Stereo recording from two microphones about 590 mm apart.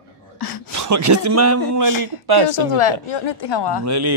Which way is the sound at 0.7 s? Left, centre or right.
Right.